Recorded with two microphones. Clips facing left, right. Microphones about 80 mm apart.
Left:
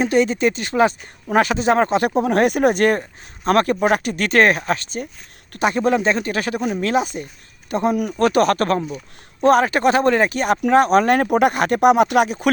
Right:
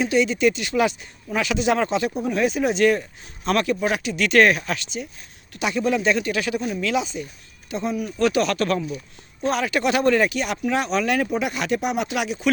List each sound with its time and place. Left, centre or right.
0.0 s speech: left
2.0 s speech: left
8.2 s speech: left